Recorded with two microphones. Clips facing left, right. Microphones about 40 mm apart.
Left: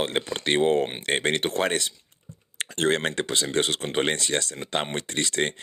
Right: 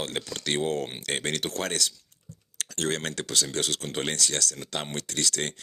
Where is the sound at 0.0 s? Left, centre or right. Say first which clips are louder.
Left 6 dB; left.